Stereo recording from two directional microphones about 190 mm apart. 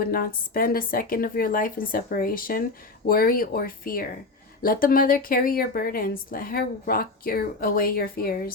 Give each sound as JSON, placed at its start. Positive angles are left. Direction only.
{"t": 0.0, "sound": "speech", "side_deg": 50}